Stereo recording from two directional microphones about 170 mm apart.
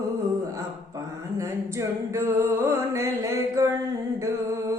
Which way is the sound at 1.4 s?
15° right (ahead or behind).